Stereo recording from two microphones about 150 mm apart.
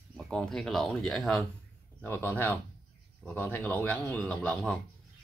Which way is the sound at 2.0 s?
15° left (ahead or behind).